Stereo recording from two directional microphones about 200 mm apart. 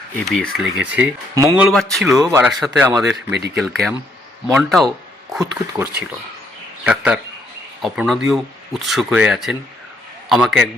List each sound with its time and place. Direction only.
0.3 s speech: centre (ahead or behind)
1.6 s speech: 5° left (ahead or behind)
5.4 s speech: 15° right (ahead or behind)
6.8 s speech: 5° right (ahead or behind)